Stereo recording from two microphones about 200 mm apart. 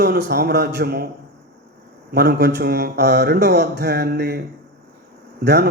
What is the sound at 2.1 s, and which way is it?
A man's voice, 55° right (ahead or behind).